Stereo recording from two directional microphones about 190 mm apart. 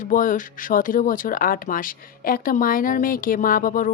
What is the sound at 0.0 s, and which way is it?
Speech, 45° left (ahead or behind).